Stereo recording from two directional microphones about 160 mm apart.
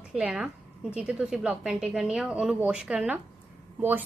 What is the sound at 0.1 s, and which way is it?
A woman's voice, 5° right (ahead or behind).